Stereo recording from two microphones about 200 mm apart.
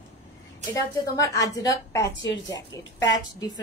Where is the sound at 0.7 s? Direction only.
15° left (ahead or behind).